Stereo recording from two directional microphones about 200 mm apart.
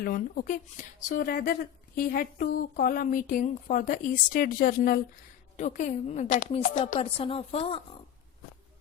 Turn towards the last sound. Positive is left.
turn(degrees=30)  # may be behind; listen again after turning